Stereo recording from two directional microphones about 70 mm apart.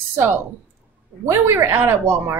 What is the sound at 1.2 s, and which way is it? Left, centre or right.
Speech, right.